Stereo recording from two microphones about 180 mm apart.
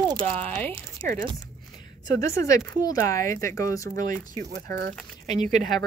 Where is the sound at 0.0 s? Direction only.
25° right (ahead or behind).